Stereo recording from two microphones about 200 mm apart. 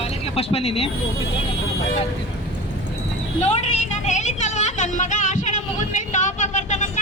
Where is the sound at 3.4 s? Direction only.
35° left (ahead or behind).